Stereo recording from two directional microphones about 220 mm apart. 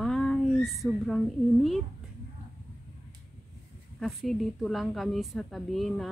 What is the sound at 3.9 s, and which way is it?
Speech, centre (ahead or behind).